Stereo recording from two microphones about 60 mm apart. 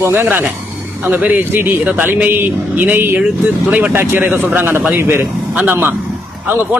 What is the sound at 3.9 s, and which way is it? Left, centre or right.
A man's voice, right.